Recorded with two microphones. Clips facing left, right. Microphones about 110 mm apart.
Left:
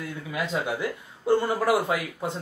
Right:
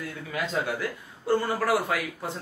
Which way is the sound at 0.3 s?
15° left (ahead or behind).